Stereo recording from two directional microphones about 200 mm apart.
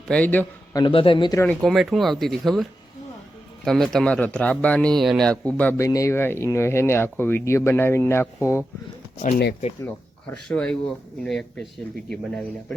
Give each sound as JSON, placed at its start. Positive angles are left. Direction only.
{"t": 0.1, "sound": "a man's voice", "side_deg": 10}
{"t": 0.8, "sound": "a man's voice", "side_deg": 25}
{"t": 1.5, "sound": "speech", "side_deg": 0}
{"t": 10.5, "sound": "speech", "side_deg": 5}